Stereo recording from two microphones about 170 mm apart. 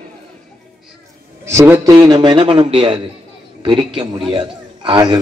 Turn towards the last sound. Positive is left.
turn(degrees=-25)  # may be behind; listen again after turning